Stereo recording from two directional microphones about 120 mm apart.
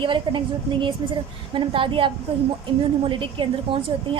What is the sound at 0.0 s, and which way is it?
A woman's voice, 40° right (ahead or behind).